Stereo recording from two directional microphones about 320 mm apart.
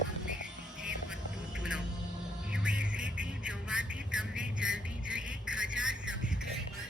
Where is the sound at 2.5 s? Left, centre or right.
Centre.